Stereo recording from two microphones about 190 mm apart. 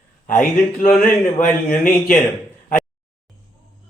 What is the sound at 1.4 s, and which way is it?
Speech, 45° left (ahead or behind).